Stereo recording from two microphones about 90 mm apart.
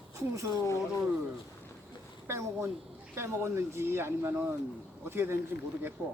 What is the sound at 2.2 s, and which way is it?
Speech, 30° right (ahead or behind).